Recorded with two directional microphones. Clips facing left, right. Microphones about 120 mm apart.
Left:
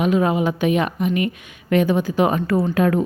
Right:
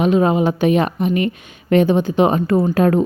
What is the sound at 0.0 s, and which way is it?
A woman's voice, 30° right (ahead or behind).